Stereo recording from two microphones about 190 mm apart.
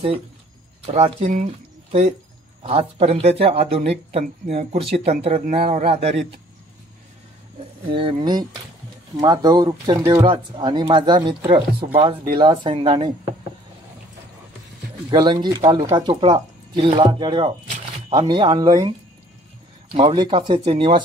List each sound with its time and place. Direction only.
0.8 s speech: 35° right (ahead or behind)
7.9 s speech: 25° right (ahead or behind)
15.0 s a man's voice: 25° right (ahead or behind)